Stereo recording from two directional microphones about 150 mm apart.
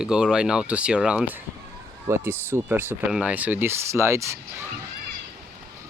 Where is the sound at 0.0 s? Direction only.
5° right (ahead or behind).